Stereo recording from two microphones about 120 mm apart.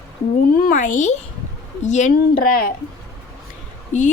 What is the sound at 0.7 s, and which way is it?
A woman's voice, 90° left.